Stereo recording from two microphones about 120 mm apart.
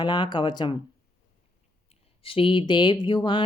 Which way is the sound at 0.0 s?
40° left (ahead or behind).